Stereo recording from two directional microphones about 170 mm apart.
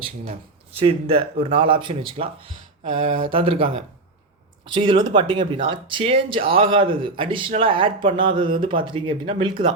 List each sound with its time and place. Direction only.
0.3 s speech: 35° right (ahead or behind)